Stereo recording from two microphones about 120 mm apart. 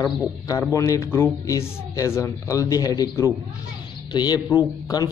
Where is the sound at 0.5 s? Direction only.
25° left (ahead or behind).